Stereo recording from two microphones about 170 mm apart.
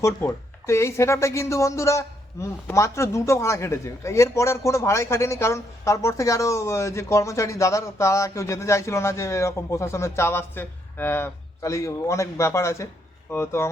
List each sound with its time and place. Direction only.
0.0 s speech: 15° left (ahead or behind)